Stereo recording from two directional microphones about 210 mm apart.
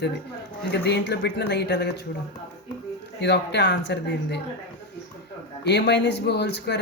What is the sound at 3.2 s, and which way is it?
Speech, 55° left (ahead or behind).